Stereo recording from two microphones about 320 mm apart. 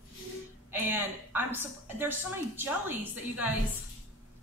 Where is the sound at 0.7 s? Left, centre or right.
Centre.